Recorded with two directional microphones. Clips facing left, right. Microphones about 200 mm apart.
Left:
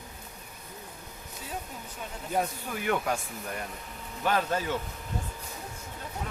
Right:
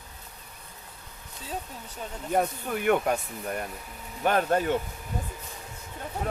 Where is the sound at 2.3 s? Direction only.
55° right (ahead or behind).